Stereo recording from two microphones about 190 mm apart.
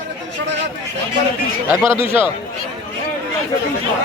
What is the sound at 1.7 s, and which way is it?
Speech, 15° right (ahead or behind).